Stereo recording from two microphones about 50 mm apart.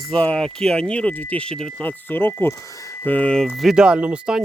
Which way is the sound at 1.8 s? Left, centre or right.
Left.